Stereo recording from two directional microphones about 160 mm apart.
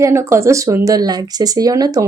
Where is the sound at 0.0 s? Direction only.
15° right (ahead or behind).